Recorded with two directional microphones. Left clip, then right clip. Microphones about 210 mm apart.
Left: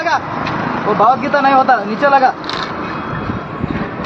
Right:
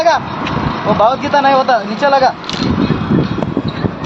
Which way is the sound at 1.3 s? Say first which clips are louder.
Even; 45° right (ahead or behind).